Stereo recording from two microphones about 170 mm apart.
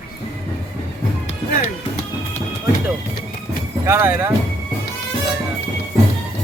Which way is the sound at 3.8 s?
15° right (ahead or behind).